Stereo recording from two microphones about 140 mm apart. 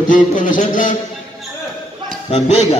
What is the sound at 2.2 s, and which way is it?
Speech, 50° left (ahead or behind).